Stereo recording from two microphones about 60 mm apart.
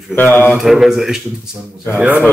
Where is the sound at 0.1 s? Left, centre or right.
Left.